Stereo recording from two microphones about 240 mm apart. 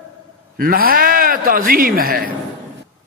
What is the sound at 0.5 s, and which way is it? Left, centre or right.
A man's voice, right.